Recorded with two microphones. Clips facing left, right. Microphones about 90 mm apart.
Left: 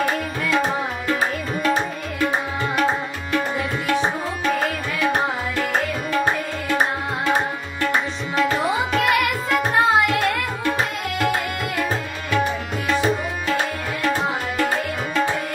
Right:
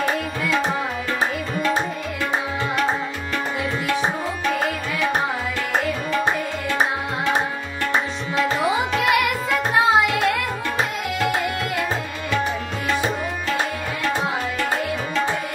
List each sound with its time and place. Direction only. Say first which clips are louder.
8.5 s music: even; 5° right (ahead or behind)